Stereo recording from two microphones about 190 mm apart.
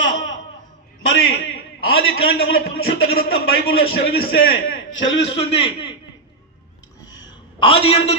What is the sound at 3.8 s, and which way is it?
Speech, 50° left (ahead or behind).